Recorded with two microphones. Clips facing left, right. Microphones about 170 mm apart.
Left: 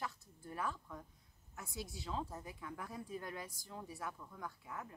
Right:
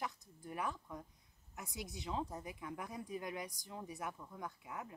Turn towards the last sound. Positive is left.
turn(degrees=-20)  # may be behind; listen again after turning